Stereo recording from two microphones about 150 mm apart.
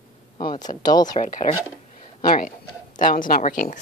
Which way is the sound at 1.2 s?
60° left (ahead or behind).